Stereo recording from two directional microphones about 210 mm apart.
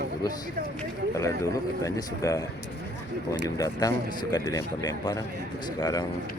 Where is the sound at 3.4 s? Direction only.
15° left (ahead or behind).